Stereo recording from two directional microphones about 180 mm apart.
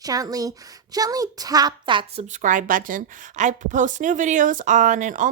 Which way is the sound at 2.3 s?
45° right (ahead or behind).